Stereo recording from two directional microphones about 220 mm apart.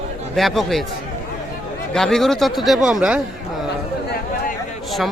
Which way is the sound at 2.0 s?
Centre (ahead or behind).